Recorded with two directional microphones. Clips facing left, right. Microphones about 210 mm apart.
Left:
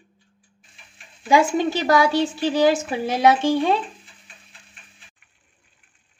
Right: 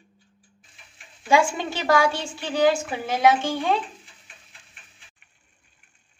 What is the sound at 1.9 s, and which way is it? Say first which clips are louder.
Speech: left 1 dB; 20° left (ahead or behind).